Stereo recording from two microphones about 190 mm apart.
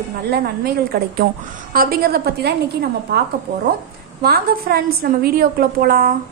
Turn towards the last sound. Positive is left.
turn(degrees=-50)  # may be behind; listen again after turning